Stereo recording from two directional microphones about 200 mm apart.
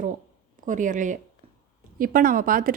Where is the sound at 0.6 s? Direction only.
40° right (ahead or behind).